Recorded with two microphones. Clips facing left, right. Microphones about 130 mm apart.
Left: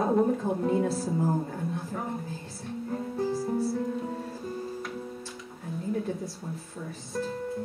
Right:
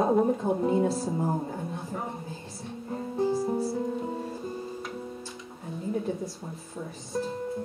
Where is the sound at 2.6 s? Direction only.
Centre (ahead or behind).